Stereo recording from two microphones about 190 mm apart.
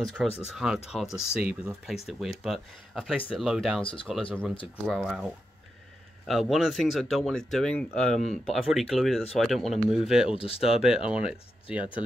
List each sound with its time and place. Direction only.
0.0 s speech: centre (ahead or behind)
3.8 s speech: 25° left (ahead or behind)
4.3 s speech: 5° left (ahead or behind)
10.3 s speech: 30° left (ahead or behind)
10.6 s speech: 5° right (ahead or behind)